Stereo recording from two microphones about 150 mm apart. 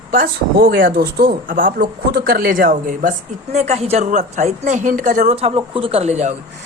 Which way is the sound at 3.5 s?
45° right (ahead or behind).